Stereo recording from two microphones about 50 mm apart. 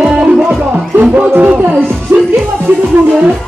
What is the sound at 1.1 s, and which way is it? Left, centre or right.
Music, right.